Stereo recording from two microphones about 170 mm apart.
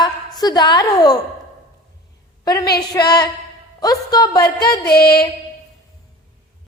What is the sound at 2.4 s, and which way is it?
A woman's voice, 20° left (ahead or behind).